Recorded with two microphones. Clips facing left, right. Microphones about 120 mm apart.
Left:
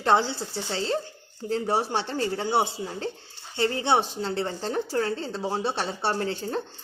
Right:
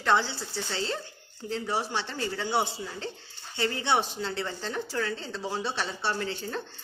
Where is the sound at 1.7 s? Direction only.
50° left (ahead or behind).